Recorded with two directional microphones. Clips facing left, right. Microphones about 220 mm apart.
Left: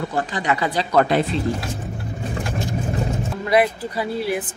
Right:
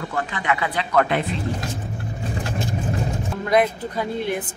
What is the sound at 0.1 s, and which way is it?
Speech, 35° left (ahead or behind).